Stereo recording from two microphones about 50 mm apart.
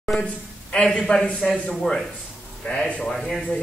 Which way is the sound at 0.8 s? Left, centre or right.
Centre.